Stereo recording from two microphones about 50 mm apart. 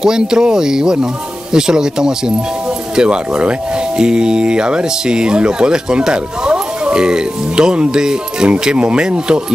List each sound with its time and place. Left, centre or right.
0.0 s speech: centre